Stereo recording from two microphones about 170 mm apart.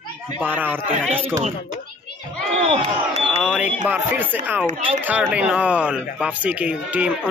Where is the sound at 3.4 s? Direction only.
5° right (ahead or behind).